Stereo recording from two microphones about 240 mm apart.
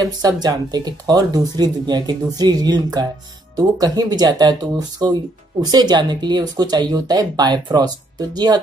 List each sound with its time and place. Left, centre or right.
0.0 s speech: centre